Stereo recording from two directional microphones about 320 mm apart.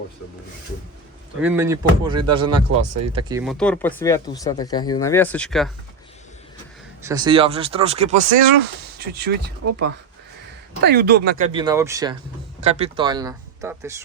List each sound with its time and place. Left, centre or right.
1.4 s speech: centre
3.4 s speech: centre
7.0 s speech: centre